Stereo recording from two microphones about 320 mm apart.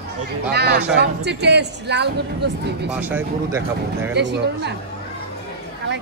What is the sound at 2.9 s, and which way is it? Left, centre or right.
Speech, centre.